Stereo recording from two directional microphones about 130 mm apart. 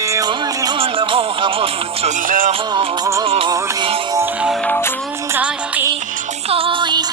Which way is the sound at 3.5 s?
30° right (ahead or behind).